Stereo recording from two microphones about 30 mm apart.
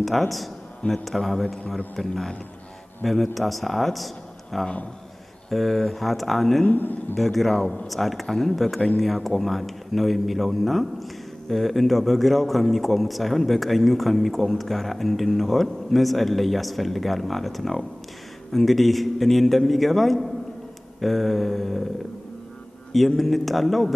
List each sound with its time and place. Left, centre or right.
0.0 s a man's voice: centre
3.1 s speech: centre
6.7 s speech: left
7.2 s speech: centre
8.3 s a man's voice: centre
8.5 s speech: centre
22.9 s speech: centre